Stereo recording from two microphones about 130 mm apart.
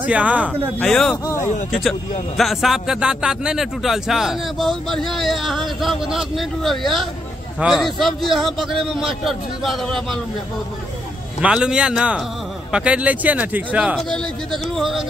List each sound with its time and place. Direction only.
0.0 s speech: 10° right (ahead or behind)
0.5 s a man's voice: 5° left (ahead or behind)
11.4 s speech: 5° right (ahead or behind)
14.1 s a man's voice: centre (ahead or behind)